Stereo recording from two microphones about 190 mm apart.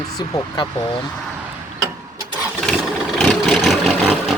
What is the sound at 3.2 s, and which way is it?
Vehicle, centre (ahead or behind).